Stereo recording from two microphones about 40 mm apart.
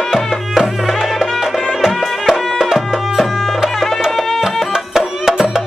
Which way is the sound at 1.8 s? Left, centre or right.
Centre.